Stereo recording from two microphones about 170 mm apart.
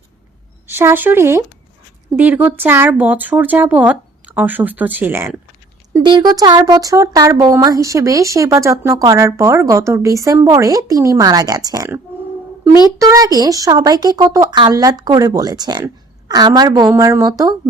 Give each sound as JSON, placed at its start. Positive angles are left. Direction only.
{"t": 0.7, "sound": "speech", "side_deg": -15}
{"t": 6.1, "sound": "speech", "side_deg": -25}
{"t": 13.0, "sound": "speech", "side_deg": -20}